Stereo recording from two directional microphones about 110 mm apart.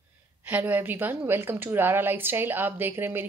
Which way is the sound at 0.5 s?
15° right (ahead or behind).